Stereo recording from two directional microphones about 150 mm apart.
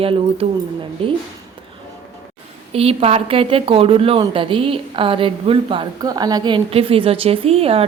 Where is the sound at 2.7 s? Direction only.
40° right (ahead or behind).